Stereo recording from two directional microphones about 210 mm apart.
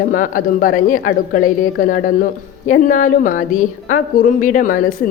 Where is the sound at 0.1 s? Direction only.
40° left (ahead or behind).